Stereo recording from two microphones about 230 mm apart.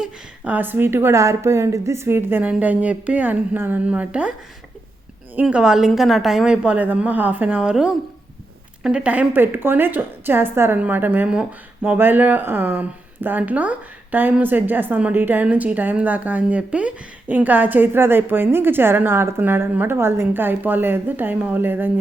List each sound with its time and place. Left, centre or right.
0.0 s a woman's voice: centre